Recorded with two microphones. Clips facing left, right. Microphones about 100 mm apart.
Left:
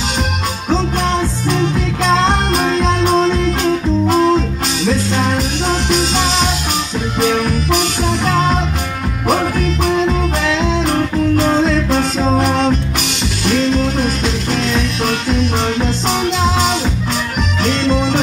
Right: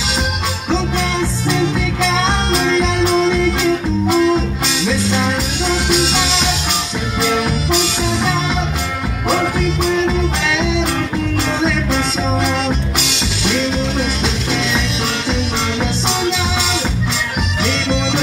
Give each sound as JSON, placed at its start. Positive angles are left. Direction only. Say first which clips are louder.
{"t": 1.5, "sound": "music", "louder": "left 1 dB", "side_deg": 45}
{"t": 5.7, "sound": "music", "louder": "right 1 dB", "side_deg": 45}
{"t": 11.3, "sound": "music", "louder": "left 4 dB", "side_deg": 50}